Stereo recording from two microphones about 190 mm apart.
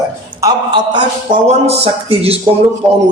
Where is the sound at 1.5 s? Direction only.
35° right (ahead or behind).